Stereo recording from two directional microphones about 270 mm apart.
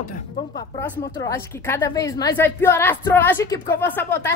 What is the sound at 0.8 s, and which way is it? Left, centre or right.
Speech, centre.